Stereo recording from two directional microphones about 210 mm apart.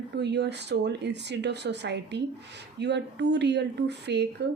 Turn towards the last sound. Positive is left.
turn(degrees=-55)  # may be behind; listen again after turning